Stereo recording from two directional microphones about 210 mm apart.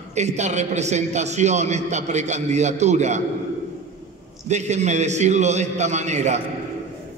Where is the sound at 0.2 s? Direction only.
35° right (ahead or behind).